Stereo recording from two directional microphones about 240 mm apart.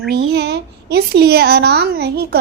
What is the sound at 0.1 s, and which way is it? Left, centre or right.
A woman's voice, right.